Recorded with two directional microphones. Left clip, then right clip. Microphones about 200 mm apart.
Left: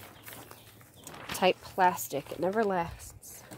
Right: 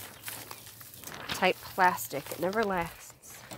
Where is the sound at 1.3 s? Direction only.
25° left (ahead or behind).